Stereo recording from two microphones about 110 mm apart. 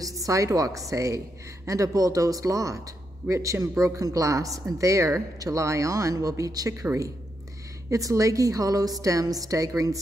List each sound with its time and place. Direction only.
0.0 s a woman's voice: 30° right (ahead or behind)
7.9 s a woman's voice: 30° right (ahead or behind)